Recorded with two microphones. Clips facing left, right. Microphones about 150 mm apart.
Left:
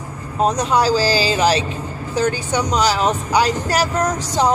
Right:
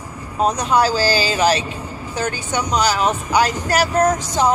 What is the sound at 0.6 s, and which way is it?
Speech, 35° left (ahead or behind).